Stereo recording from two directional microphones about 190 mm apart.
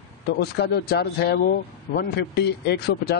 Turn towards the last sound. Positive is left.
turn(degrees=55)  # may be behind; listen again after turning